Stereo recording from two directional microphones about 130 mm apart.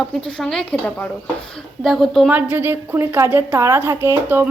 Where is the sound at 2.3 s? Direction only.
15° right (ahead or behind).